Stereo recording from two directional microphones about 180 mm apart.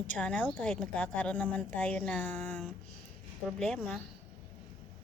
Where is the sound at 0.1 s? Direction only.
5° left (ahead or behind).